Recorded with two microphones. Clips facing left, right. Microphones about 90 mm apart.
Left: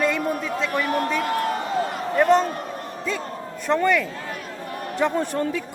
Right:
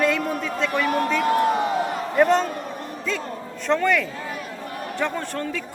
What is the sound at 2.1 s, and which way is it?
Speech, centre (ahead or behind).